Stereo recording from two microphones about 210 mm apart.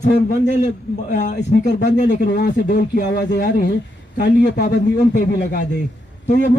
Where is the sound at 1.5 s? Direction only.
55° left (ahead or behind).